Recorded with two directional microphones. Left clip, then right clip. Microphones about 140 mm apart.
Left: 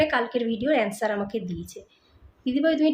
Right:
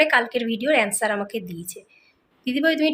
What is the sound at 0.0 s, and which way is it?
A woman's voice, 10° left (ahead or behind).